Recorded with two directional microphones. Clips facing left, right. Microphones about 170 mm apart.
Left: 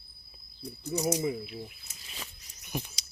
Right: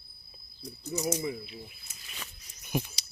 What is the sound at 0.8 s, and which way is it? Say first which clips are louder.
Speech: left 2 dB; 15° left (ahead or behind).